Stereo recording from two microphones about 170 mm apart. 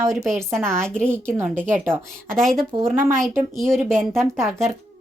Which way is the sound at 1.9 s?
5° left (ahead or behind).